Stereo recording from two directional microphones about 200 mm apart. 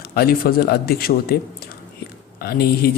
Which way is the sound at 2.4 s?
50° left (ahead or behind).